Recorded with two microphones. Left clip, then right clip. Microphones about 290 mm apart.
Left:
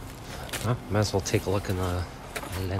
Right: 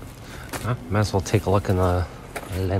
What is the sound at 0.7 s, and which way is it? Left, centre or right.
Speech, centre.